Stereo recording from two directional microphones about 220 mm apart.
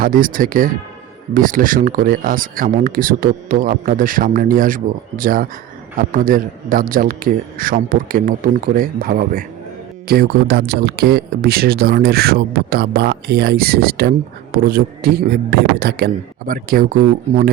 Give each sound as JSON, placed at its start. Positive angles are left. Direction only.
{"t": 0.0, "sound": "speech", "side_deg": -40}